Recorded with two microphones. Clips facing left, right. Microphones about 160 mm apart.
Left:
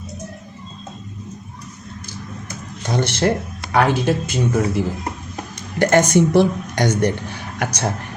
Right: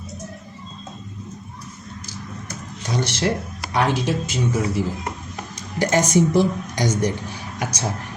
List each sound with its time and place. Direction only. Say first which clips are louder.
2.9 s speech: left 4 dB; 55° left (ahead or behind)